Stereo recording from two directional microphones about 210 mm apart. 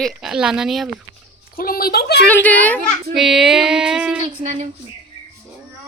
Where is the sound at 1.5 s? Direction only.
45° left (ahead or behind).